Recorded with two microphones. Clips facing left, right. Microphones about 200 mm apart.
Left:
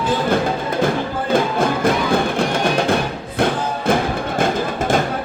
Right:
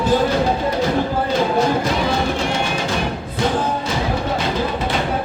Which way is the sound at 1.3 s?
55° left (ahead or behind).